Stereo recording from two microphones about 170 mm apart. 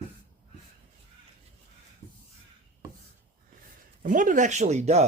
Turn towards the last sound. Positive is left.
turn(degrees=-40)  # may be behind; listen again after turning